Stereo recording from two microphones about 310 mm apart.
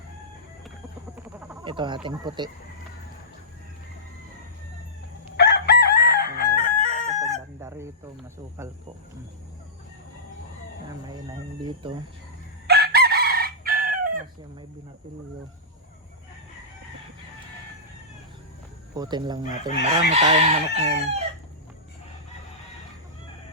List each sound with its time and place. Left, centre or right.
1.1 s frog: centre
1.6 s chicken: centre
5.4 s chicken: left
7.2 s chicken: centre
11.8 s chicken: centre
12.6 s chicken: right
18.9 s chicken: centre